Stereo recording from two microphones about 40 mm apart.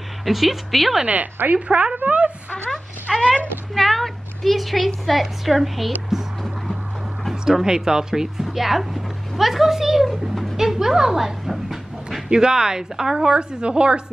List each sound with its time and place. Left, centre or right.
0.2 s a woman's voice: centre
1.0 s a woman's voice: right
2.0 s a sound: right
3.1 s a sound: centre
3.7 s a woman's voice: centre
7.4 s speech: centre
10.6 s dog: centre
12.3 s a woman's voice: centre